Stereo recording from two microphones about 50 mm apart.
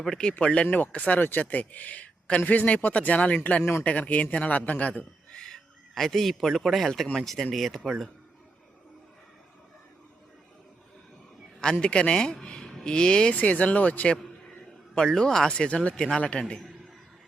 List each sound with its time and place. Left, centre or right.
0.0 s a man's voice: centre; by 3.3 s left
3.6 s speech: left
3.8 s a man's voice: left
5.4 s a man's voice: centre
11.6 s a man's voice: centre
13.3 s a man's voice: left
14.9 s a man's voice: centre
16.4 s a man's voice: centre